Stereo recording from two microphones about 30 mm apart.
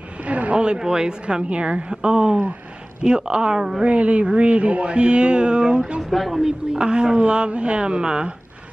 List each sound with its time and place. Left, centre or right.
0.2 s a sound: right
0.7 s speech: right
1.2 s speech: right
2.0 s speech: right
3.8 s speech: right
6.0 s speech: centre
6.4 s speech: right